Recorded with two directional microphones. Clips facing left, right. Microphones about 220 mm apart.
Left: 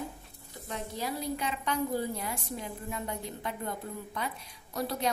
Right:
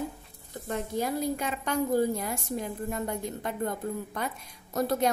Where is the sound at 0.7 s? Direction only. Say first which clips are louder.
Right 6 dB; 50° right (ahead or behind).